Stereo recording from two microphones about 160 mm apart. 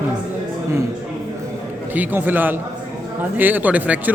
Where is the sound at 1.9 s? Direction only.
10° right (ahead or behind).